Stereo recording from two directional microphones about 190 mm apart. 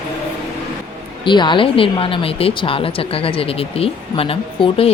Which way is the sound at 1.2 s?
25° left (ahead or behind).